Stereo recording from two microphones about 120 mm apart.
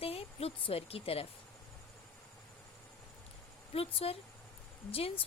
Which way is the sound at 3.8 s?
55° left (ahead or behind).